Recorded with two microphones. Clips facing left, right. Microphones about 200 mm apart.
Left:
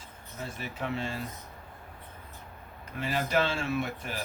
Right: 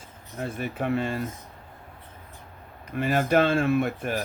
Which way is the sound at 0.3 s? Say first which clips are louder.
Right 7 dB; 55° right (ahead or behind).